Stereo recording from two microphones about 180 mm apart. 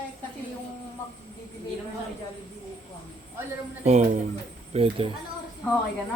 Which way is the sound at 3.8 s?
40° right (ahead or behind).